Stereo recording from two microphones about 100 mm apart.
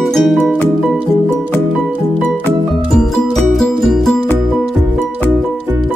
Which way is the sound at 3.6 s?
5° left (ahead or behind).